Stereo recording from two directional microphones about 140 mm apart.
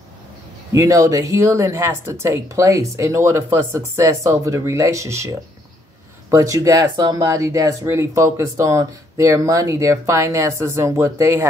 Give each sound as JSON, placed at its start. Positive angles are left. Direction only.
{"t": 0.7, "sound": "speech", "side_deg": -25}
{"t": 6.3, "sound": "speech", "side_deg": -20}